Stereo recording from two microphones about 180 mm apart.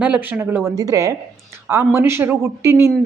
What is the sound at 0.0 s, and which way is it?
A woman's voice, 10° right (ahead or behind).